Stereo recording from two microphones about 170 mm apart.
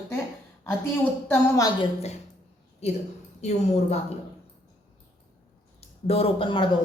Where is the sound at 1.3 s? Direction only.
20° left (ahead or behind).